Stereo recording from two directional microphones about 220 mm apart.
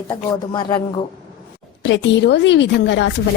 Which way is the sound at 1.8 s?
55° left (ahead or behind).